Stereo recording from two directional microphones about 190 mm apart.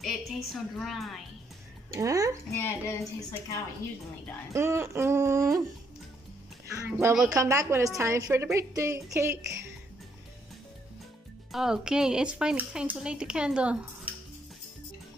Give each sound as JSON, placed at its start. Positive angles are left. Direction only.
{"t": 0.0, "sound": "a woman's voice", "side_deg": 0}
{"t": 1.9, "sound": "a woman's voice", "side_deg": -15}
{"t": 2.5, "sound": "speech", "side_deg": 15}
{"t": 4.6, "sound": "a woman's voice", "side_deg": -15}
{"t": 6.7, "sound": "a woman's voice", "side_deg": -15}
{"t": 11.5, "sound": "speech", "side_deg": -5}